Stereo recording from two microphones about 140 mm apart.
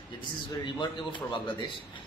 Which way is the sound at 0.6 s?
35° left (ahead or behind).